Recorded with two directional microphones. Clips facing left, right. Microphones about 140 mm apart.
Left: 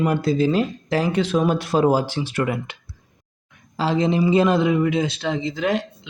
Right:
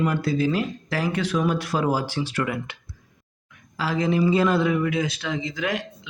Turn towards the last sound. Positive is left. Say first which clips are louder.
# left 5 dB
turn(degrees=30)  # may be behind; listen again after turning